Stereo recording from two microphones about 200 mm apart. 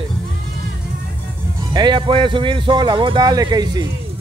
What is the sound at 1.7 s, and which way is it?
Speech, 20° right (ahead or behind).